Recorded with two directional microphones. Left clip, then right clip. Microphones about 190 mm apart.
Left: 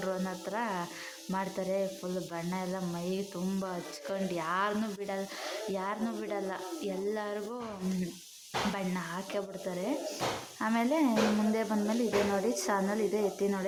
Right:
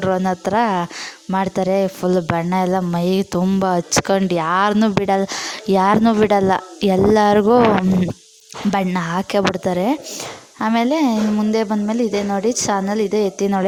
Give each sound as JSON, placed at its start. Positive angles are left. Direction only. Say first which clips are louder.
{"t": 0.0, "sound": "speech", "louder": "right 17 dB", "side_deg": -50}
{"t": 8.7, "sound": "speech", "louder": "right 17 dB", "side_deg": -50}